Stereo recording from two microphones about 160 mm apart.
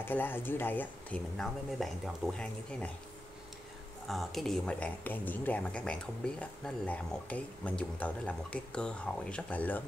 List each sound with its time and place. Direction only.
0.0 s speech: 15° left (ahead or behind)
4.1 s speech: centre (ahead or behind)